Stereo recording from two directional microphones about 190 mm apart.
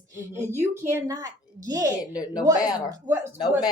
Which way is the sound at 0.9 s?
15° right (ahead or behind).